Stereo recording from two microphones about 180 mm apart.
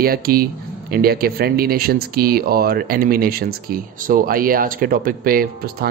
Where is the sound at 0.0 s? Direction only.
55° right (ahead or behind).